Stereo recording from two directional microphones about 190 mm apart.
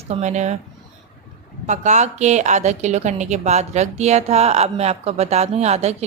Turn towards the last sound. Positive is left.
turn(degrees=-35)  # may be behind; listen again after turning